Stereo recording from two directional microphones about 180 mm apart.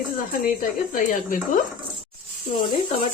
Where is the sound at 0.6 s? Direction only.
50° left (ahead or behind).